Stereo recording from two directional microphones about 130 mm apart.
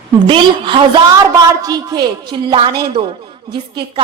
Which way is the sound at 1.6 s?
30° right (ahead or behind).